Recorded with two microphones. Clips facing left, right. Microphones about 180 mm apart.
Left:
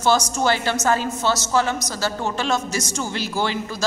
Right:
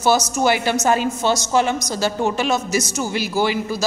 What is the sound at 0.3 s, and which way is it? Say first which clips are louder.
A woman's voice: right 3 dB; 15° right (ahead or behind).